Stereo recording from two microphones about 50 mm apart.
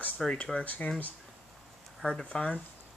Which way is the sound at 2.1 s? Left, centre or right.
Centre.